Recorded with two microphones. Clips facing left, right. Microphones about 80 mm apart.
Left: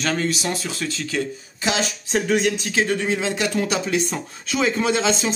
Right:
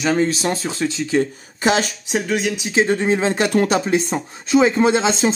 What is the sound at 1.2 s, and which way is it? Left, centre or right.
Speech, right.